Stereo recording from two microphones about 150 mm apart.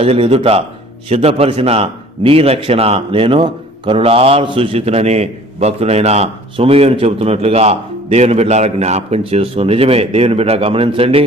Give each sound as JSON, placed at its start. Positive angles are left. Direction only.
{"t": 0.0, "sound": "a man's voice", "side_deg": -40}